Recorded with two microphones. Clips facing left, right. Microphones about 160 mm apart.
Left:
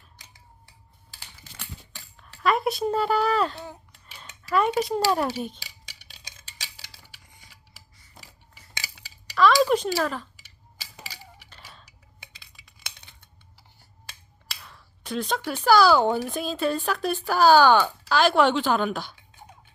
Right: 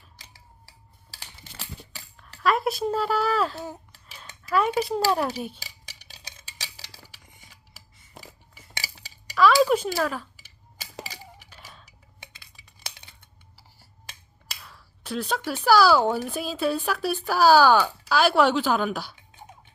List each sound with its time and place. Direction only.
2.1 s speech: centre (ahead or behind)
6.1 s tick-tock: 40° right (ahead or behind)
8.8 s dishes: 40° right (ahead or behind)
9.3 s a sound: 5° right (ahead or behind)
10.0 s speech: 5° right (ahead or behind)
11.4 s a sound: 5° right (ahead or behind)
12.2 s cutlery: 35° right (ahead or behind)
14.6 s speech: 5° right (ahead or behind)